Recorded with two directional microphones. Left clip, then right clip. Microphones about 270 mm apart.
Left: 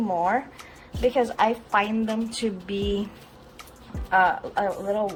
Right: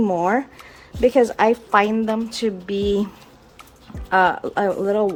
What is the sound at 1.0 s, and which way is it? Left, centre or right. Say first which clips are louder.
A woman's voice: right 6 dB; right.